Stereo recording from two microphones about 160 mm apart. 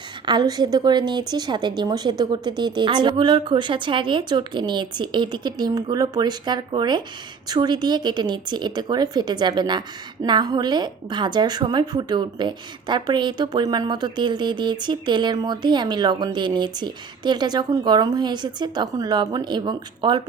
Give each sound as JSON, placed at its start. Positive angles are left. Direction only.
{"t": 0.3, "sound": "a woman's voice", "side_deg": -25}